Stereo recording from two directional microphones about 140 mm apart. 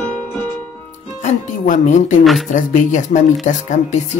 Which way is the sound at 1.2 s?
60° left (ahead or behind).